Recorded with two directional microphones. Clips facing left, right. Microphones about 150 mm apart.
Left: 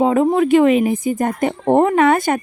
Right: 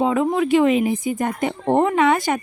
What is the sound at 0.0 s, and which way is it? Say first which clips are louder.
Speech: left 4 dB; 45° left (ahead or behind).